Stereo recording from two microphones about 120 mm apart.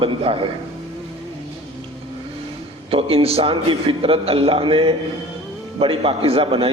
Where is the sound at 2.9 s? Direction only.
50° right (ahead or behind).